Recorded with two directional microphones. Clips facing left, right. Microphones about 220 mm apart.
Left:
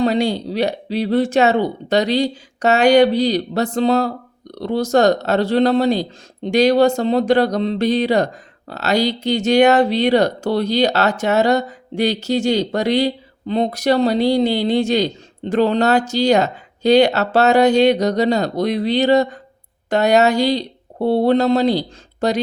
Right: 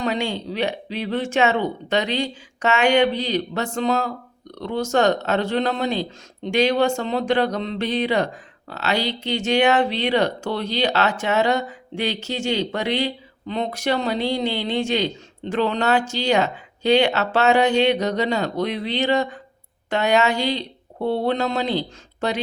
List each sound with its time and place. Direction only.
0.0 s speech: 35° left (ahead or behind)